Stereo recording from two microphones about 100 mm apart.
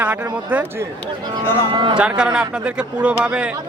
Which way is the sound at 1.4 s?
25° left (ahead or behind).